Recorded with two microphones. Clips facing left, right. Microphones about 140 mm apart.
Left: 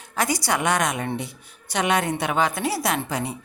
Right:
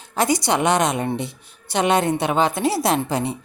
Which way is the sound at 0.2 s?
25° right (ahead or behind).